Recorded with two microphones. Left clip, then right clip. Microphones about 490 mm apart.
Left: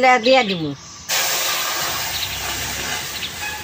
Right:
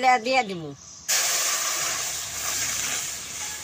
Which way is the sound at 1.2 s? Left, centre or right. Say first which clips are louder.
Left 6 dB; right.